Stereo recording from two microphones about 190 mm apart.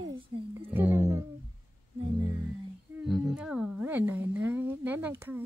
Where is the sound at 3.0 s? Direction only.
Centre (ahead or behind).